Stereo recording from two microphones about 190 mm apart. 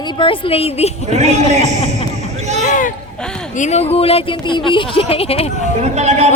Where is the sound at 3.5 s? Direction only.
35° left (ahead or behind).